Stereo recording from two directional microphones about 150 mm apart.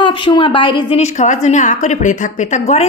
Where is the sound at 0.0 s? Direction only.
35° left (ahead or behind).